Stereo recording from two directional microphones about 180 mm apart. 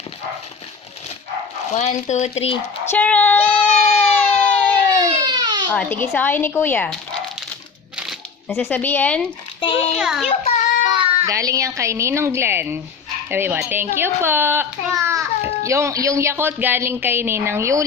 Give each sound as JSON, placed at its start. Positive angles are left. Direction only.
{"t": 1.7, "sound": "speech", "side_deg": 40}
{"t": 2.9, "sound": "a woman's voice", "side_deg": 10}
{"t": 4.1, "sound": "a sound", "side_deg": 10}
{"t": 4.9, "sound": "baby cry", "side_deg": -20}
{"t": 5.7, "sound": "a woman's voice", "side_deg": 10}
{"t": 7.9, "sound": "a sound", "side_deg": 0}
{"t": 8.5, "sound": "a woman's voice", "side_deg": 10}
{"t": 9.6, "sound": "a child's voice", "side_deg": 30}
{"t": 10.0, "sound": "a child's voice", "side_deg": -5}
{"t": 10.2, "sound": "child singing", "side_deg": 35}
{"t": 11.0, "sound": "music", "side_deg": -35}
{"t": 11.3, "sound": "a child's voice", "side_deg": -20}